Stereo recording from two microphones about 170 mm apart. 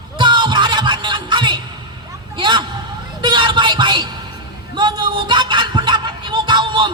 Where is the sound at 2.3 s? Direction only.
30° right (ahead or behind).